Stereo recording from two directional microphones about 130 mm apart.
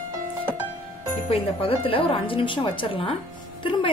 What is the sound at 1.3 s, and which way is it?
A woman's voice, 45° left (ahead or behind).